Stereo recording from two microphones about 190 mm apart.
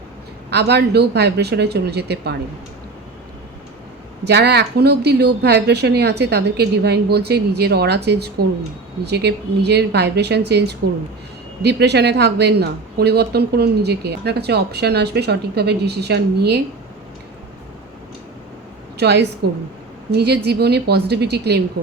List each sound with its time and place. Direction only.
0.5 s speech: 60° right (ahead or behind)
4.3 s speech: 60° right (ahead or behind)
18.9 s speech: 60° right (ahead or behind)